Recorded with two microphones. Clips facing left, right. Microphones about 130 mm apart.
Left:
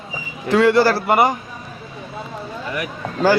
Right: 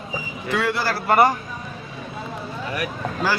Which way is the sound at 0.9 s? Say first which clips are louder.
Left 5 dB; 30° left (ahead or behind).